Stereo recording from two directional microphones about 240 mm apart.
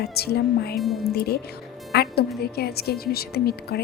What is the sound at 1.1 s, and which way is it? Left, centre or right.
Speech, left.